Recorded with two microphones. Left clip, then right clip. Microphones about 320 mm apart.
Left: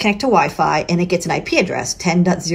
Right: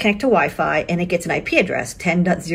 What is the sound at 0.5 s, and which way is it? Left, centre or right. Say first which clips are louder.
Speech: left 3 dB; left.